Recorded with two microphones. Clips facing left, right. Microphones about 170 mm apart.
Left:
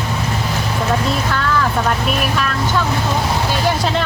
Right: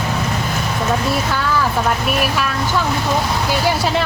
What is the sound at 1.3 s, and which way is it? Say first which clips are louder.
Speech: even; 10° right (ahead or behind).